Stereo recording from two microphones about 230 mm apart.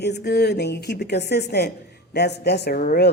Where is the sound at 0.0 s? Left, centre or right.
Left.